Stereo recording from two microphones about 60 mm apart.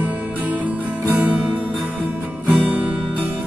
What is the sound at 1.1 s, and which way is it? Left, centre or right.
Music, right.